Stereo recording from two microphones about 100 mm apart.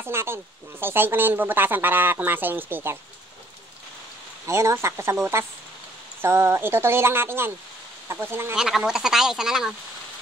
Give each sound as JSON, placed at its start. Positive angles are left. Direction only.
{"t": 0.0, "sound": "speech", "side_deg": -25}
{"t": 4.5, "sound": "speech", "side_deg": -30}
{"t": 8.5, "sound": "speech", "side_deg": -5}